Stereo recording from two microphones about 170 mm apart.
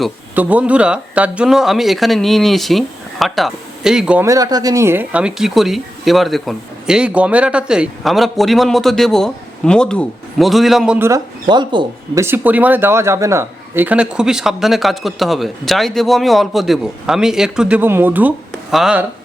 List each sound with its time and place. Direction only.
0.3 s speech: 10° right (ahead or behind)
4.3 s speech: 20° right (ahead or behind)
11.4 s speech: 25° right (ahead or behind)
12.2 s speech: 10° right (ahead or behind)